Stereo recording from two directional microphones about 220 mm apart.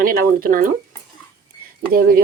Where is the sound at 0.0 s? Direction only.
40° right (ahead or behind).